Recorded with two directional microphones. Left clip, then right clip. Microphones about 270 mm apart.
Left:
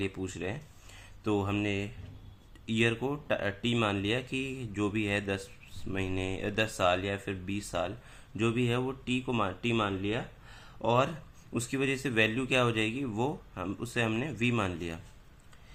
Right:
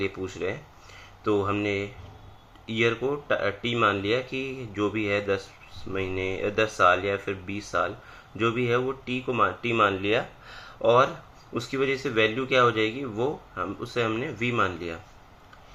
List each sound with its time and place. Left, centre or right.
0.0 s speech: centre